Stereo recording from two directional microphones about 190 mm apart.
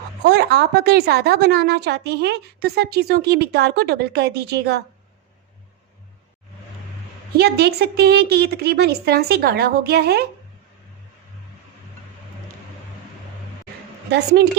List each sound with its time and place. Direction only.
0.3 s a woman's voice: 60° right (ahead or behind)
7.3 s a woman's voice: 60° right (ahead or behind)